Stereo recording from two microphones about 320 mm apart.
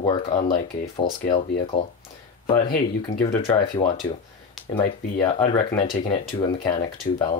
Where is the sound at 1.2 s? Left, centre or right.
Centre.